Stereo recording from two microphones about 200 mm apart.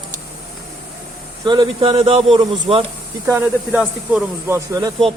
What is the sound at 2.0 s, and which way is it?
Speech, 30° right (ahead or behind).